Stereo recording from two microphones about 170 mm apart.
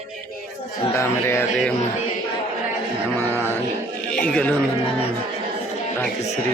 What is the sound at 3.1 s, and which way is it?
Music, 15° left (ahead or behind).